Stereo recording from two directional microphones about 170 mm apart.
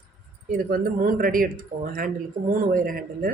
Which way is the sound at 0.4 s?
60° right (ahead or behind).